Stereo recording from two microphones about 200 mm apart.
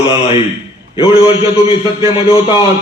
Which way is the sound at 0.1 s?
25° left (ahead or behind).